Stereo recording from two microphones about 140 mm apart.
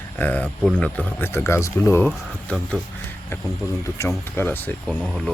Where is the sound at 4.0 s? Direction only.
15° left (ahead or behind).